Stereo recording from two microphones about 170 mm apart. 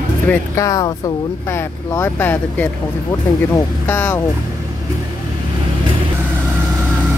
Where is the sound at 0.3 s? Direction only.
20° left (ahead or behind).